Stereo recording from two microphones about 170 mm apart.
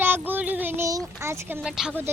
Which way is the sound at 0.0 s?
10° right (ahead or behind).